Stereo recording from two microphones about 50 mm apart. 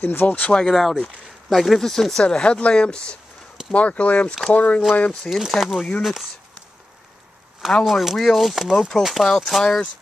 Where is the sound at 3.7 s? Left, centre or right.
Left.